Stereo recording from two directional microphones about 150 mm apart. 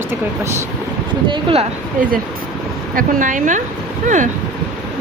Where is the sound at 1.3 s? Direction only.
35° right (ahead or behind).